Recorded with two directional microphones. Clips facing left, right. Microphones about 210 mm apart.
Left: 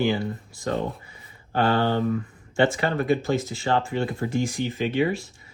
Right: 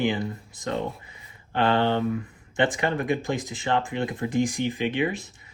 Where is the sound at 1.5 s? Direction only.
45° left (ahead or behind).